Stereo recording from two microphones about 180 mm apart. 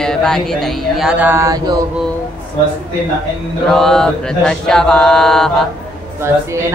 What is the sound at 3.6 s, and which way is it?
Mantra, centre (ahead or behind).